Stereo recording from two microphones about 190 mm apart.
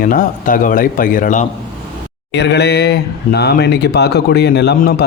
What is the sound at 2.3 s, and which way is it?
Speech, 65° left (ahead or behind).